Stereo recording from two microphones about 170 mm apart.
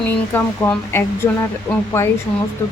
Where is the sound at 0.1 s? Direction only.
10° left (ahead or behind).